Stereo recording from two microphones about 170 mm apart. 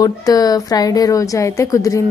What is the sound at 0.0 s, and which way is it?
A woman's voice, 20° left (ahead or behind).